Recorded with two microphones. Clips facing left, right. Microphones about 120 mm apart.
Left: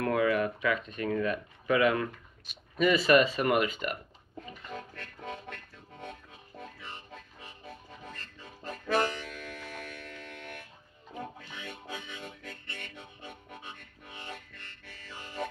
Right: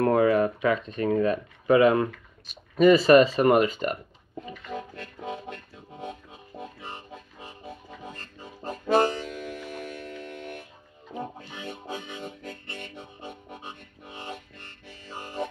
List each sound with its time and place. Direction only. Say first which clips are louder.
0.0 s speech: right 6 dB; 35° right (ahead or behind)
4.5 s music: right 6 dB; 20° right (ahead or behind)
8.6 s harmonica: right 7 dB; 30° right (ahead or behind)
9.3 s music: right 7 dB; 20° right (ahead or behind)
9.8 s music: right 7 dB; 35° right (ahead or behind)
14.3 s music: right 5 dB; 20° right (ahead or behind)